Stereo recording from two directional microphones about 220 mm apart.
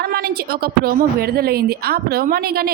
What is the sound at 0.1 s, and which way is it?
Speech, 45° right (ahead or behind).